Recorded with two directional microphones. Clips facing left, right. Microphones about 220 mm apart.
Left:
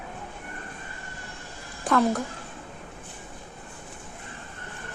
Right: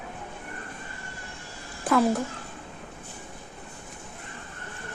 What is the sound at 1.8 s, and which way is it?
Speech, 5° right (ahead or behind).